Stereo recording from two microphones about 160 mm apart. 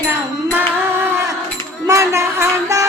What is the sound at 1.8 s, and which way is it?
Music, 20° right (ahead or behind).